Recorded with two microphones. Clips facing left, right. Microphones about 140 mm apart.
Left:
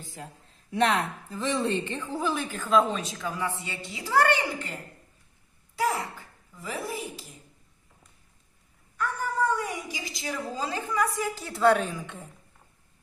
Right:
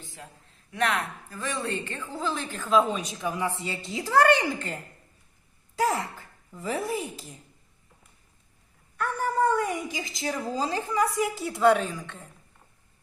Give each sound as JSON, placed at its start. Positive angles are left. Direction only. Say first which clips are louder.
{"t": 0.0, "sound": "a sound", "louder": "left 3 dB", "side_deg": 40}
{"t": 0.7, "sound": "speech", "louder": "left 3 dB", "side_deg": 30}
{"t": 3.1, "sound": "speech", "louder": "right 2 dB", "side_deg": -20}
{"t": 3.6, "sound": "a woman's voice", "louder": "right 5 dB", "side_deg": -35}
{"t": 5.7, "sound": "a sound", "louder": "right 2 dB", "side_deg": -45}
{"t": 6.6, "sound": "a woman's voice", "louder": "right 4 dB", "side_deg": -40}
{"t": 9.6, "sound": "a woman's voice", "louder": "right 5 dB", "side_deg": -50}
{"t": 11.4, "sound": "a woman's voice", "louder": "even", "side_deg": -5}
{"t": 12.0, "sound": "a woman's voice", "louder": "left 2 dB", "side_deg": 10}